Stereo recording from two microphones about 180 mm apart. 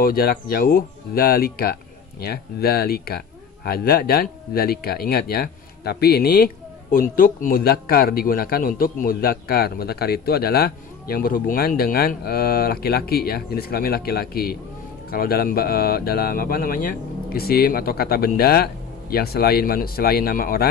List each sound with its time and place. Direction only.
0.0 s speech: 55° left (ahead or behind)